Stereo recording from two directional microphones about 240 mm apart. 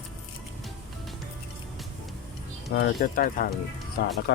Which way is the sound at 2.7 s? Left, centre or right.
Left.